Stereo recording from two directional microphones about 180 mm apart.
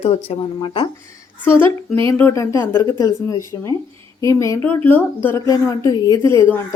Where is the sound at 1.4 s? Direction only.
15° left (ahead or behind).